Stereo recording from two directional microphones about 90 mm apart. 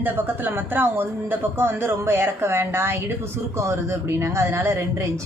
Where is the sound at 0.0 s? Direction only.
20° right (ahead or behind).